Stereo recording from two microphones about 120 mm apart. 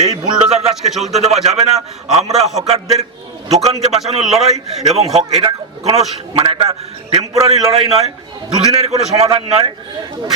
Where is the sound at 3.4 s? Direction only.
65° right (ahead or behind).